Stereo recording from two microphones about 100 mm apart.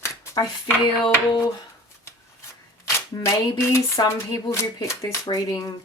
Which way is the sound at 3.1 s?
45° left (ahead or behind).